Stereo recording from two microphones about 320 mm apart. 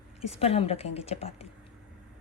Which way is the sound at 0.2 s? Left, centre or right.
Centre.